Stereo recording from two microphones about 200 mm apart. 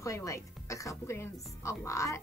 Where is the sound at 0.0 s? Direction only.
15° left (ahead or behind).